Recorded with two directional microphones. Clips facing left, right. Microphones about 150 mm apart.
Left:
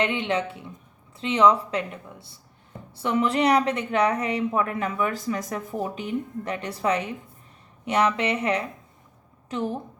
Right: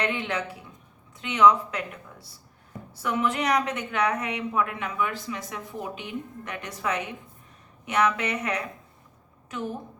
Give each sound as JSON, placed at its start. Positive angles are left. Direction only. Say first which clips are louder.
{"t": 0.0, "sound": "a woman's voice", "louder": "left 4 dB", "side_deg": 25}